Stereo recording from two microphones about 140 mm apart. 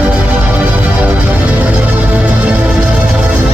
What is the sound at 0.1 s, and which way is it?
Music, 10° right (ahead or behind).